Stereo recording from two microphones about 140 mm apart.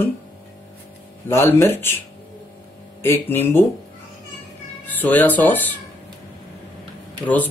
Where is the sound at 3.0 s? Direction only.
15° left (ahead or behind).